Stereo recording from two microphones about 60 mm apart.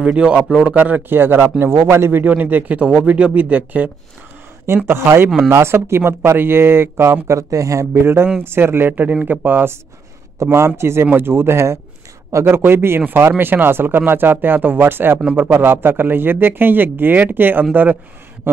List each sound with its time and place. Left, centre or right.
0.0 s speech: centre
1.1 s a man's voice: right
4.8 s speech: right
7.2 s speech: right
7.9 s a man's voice: right
10.4 s a man's voice: right